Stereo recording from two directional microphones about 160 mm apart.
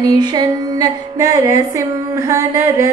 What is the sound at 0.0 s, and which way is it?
Music, 25° right (ahead or behind).